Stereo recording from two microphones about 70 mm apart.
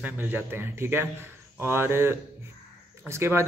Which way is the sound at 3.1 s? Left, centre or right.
Right.